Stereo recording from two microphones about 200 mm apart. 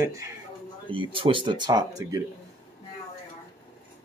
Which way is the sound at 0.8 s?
25° right (ahead or behind).